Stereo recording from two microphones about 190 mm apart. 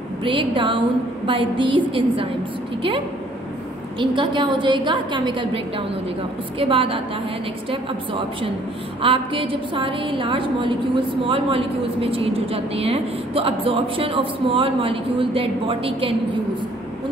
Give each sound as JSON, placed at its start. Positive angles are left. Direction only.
{"t": 0.2, "sound": "a woman's voice", "side_deg": -25}
{"t": 4.0, "sound": "a woman's voice", "side_deg": -25}